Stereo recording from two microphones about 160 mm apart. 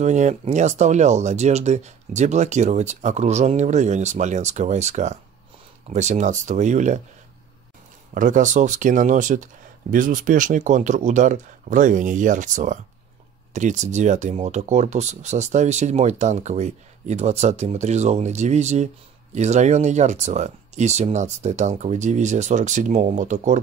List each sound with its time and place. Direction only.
0.0 s speech: 45° right (ahead or behind)
8.1 s speech: 55° right (ahead or behind)